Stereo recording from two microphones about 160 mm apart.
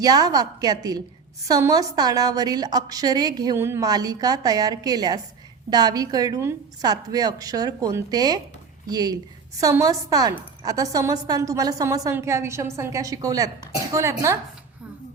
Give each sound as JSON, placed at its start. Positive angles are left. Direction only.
{"t": 0.0, "sound": "a woman's voice", "side_deg": -25}